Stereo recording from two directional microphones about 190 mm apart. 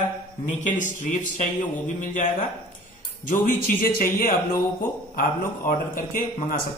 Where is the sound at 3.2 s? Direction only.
45° left (ahead or behind).